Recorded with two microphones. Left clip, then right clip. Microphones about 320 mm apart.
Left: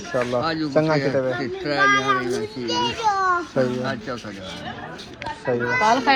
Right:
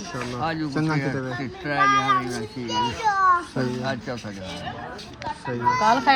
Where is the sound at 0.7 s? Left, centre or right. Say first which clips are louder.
Left 6 dB; centre.